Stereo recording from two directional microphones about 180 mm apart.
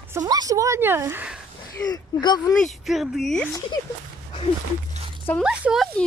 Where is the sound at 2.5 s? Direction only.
Centre (ahead or behind).